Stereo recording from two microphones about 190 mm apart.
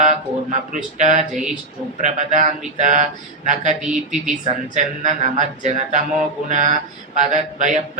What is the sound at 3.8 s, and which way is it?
Speech, 5° right (ahead or behind).